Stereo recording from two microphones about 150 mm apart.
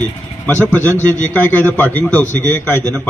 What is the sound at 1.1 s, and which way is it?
A man's voice, 10° left (ahead or behind).